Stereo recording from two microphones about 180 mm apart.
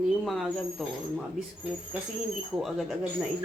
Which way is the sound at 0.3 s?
Centre (ahead or behind).